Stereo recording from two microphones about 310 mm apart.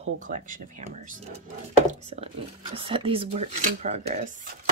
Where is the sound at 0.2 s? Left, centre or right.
Right.